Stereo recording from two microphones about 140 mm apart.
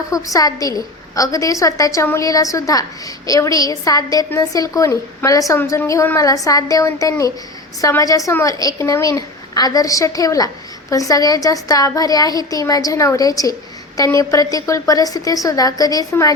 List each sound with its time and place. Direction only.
0.1 s a woman's voice: 25° left (ahead or behind)